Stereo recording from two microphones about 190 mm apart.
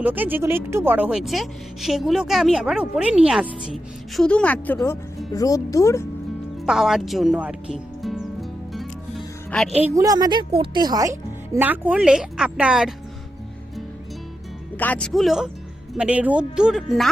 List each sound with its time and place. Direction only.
0.0 s speech: 10° right (ahead or behind)
4.2 s speech: 5° left (ahead or behind)
4.8 s speech: 20° left (ahead or behind)
6.7 s music: centre (ahead or behind)
9.8 s speech: 15° right (ahead or behind)
14.8 s speech: 5° left (ahead or behind)